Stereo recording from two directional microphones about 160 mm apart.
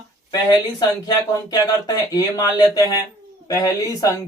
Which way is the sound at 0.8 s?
25° left (ahead or behind).